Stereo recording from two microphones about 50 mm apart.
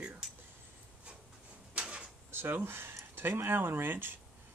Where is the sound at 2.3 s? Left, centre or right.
Right.